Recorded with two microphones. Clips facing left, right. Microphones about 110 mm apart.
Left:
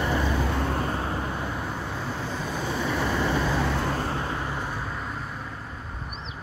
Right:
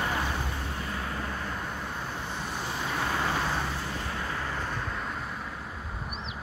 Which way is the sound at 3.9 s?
35° left (ahead or behind).